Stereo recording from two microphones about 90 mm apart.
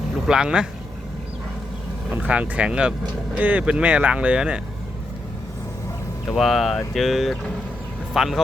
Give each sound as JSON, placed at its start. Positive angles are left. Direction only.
{"t": 0.3, "sound": "speech", "side_deg": -10}
{"t": 2.0, "sound": "speech", "side_deg": -15}
{"t": 6.3, "sound": "a man's voice", "side_deg": 0}